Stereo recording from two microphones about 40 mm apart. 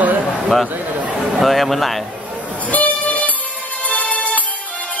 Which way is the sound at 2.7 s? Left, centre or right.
Left.